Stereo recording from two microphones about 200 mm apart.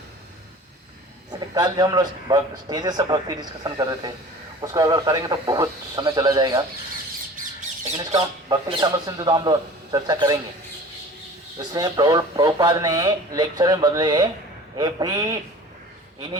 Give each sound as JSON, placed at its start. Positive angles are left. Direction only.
{"t": 1.3, "sound": "speech", "side_deg": -20}
{"t": 7.9, "sound": "speech", "side_deg": -20}
{"t": 11.7, "sound": "speech", "side_deg": -20}